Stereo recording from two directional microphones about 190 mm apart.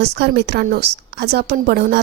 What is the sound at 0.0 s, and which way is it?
A woman's voice, 60° right (ahead or behind).